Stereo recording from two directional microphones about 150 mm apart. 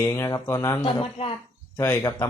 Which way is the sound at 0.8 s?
35° left (ahead or behind).